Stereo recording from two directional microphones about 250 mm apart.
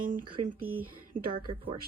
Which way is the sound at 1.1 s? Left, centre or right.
Right.